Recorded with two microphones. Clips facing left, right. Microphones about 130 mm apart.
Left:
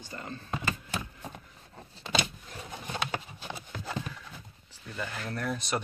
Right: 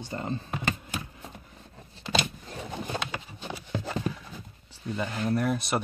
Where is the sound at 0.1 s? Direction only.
25° right (ahead or behind).